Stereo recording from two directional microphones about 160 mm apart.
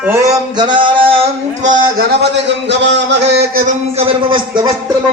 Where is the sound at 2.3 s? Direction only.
90° right.